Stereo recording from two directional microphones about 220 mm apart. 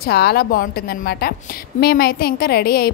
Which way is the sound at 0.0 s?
45° left (ahead or behind).